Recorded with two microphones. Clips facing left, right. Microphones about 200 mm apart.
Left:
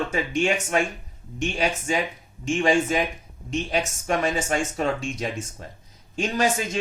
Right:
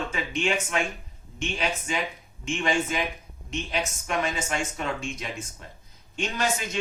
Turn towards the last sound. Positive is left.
turn(degrees=40)  # may be behind; listen again after turning